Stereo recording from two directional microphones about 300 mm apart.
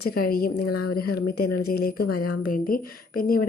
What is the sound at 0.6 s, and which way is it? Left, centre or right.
Speech, left.